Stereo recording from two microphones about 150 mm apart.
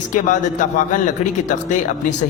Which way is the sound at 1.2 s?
50° left (ahead or behind).